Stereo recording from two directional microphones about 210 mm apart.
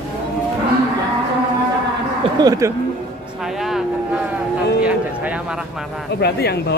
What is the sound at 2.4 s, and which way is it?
Speech, 15° right (ahead or behind).